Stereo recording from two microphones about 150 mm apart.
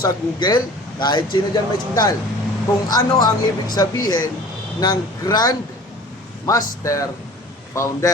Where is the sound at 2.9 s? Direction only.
25° left (ahead or behind).